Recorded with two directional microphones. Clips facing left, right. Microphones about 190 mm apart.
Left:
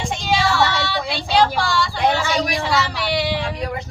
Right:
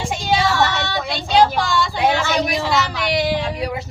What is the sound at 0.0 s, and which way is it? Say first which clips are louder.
Child singing: right 1 dB; 5° right (ahead or behind).